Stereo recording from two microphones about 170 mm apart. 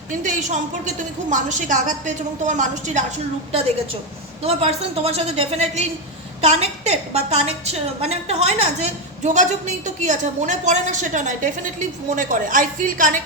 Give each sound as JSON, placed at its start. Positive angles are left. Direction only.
{"t": 0.1, "sound": "a woman's voice", "side_deg": -50}
{"t": 4.4, "sound": "a woman's voice", "side_deg": -35}